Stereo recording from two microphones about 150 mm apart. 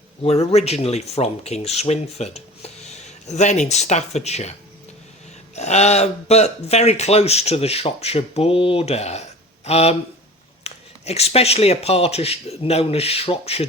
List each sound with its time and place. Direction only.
0.2 s speech: 45° left (ahead or behind)
5.5 s speech: 45° left (ahead or behind)